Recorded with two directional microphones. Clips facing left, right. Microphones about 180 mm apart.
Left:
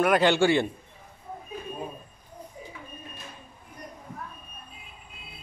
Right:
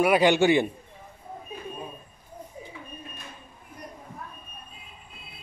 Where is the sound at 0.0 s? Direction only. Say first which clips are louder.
Right 1 dB; 10° right (ahead or behind).